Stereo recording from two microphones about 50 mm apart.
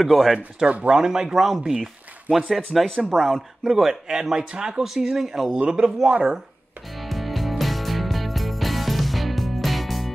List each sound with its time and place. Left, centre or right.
0.0 s speech: centre
0.7 s speech: right
0.9 s speech: centre
3.6 s speech: centre
7.0 s music: centre